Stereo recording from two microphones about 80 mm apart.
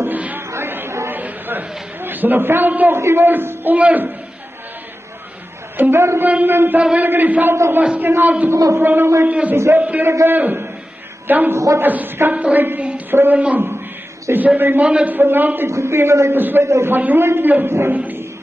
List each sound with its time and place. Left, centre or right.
0.0 s a sound: right
0.5 s chatter: right
1.2 s a sound: right
3.0 s a woman's voice: right
5.8 s a woman's voice: right
7.5 s a man's voice: right
8.5 s a man's voice: right
8.8 s a woman's voice: right
10.0 s a woman's voice: right
11.5 s a man's voice: right
11.8 s a woman's voice: right
15.7 s a man's voice: right
16.6 s a man's voice: right
16.9 s a woman's voice: right